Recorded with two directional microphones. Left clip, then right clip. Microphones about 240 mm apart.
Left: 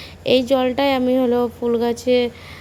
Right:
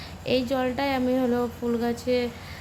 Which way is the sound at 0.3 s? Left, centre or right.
Left.